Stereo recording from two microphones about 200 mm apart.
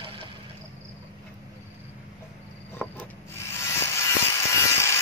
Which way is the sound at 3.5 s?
10° left (ahead or behind).